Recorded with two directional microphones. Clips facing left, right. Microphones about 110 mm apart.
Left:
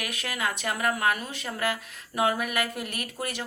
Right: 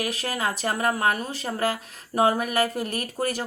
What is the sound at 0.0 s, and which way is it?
Speech, 35° right (ahead or behind).